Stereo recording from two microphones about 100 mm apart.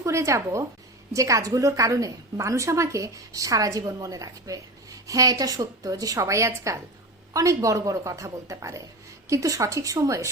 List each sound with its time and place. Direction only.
0.0 s a woman's voice: 30° right (ahead or behind)